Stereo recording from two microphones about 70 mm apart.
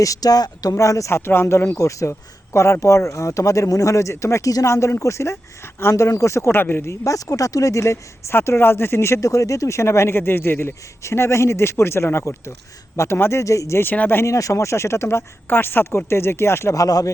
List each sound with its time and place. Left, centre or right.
0.0 s speech: left
6.5 s speech: left
7.0 s speech: left
13.4 s speech: left
13.8 s speech: left
14.2 s speech: left
16.7 s speech: left